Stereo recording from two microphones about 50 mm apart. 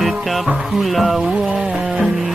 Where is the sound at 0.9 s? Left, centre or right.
Centre.